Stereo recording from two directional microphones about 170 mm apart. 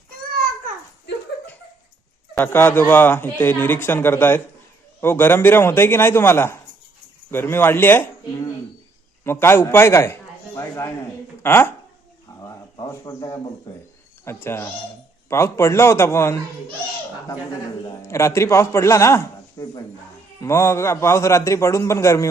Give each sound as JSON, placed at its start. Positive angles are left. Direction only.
{"t": 2.3, "sound": "speech", "side_deg": 10}
{"t": 9.2, "sound": "a man's voice", "side_deg": 15}
{"t": 12.4, "sound": "a sound", "side_deg": 20}
{"t": 14.3, "sound": "speech", "side_deg": 15}
{"t": 17.8, "sound": "speech", "side_deg": 15}